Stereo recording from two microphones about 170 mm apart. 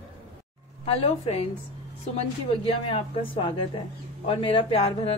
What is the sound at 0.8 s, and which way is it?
Speech, 35° left (ahead or behind).